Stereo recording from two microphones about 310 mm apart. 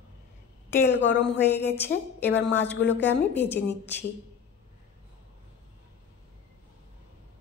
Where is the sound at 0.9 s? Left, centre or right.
Left.